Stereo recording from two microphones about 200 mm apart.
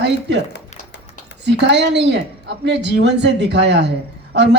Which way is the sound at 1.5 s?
60° right (ahead or behind).